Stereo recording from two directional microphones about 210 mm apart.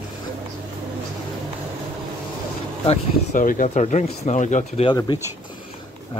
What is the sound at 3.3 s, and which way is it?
Speech, 40° left (ahead or behind).